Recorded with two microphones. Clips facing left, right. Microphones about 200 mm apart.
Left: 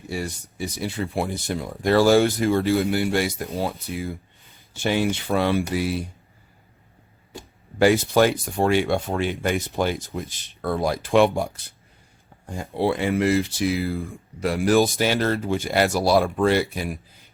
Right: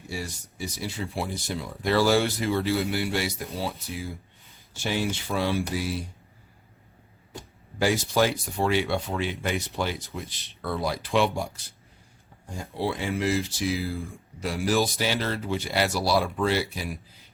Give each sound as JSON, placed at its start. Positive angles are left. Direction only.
{"t": 0.1, "sound": "speech", "side_deg": 55}
{"t": 7.8, "sound": "speech", "side_deg": 60}